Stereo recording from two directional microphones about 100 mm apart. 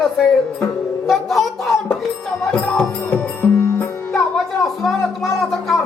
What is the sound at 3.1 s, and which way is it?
Music, 20° left (ahead or behind).